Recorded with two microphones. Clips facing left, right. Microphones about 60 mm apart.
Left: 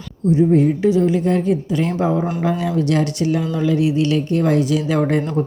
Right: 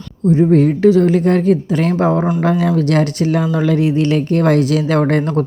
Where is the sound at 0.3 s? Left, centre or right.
Right.